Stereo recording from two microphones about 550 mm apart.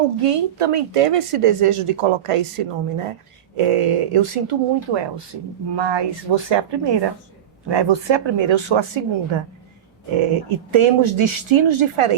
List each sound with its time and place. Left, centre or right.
0.2 s a woman's voice: right
10.2 s speech: right